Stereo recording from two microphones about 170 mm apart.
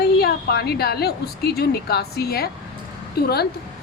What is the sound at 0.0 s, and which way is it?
A woman's voice, 65° left (ahead or behind).